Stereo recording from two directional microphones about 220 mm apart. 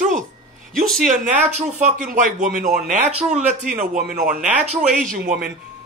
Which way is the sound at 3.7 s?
45° right (ahead or behind).